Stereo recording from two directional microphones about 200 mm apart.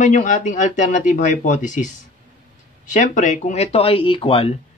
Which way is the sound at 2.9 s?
40° left (ahead or behind).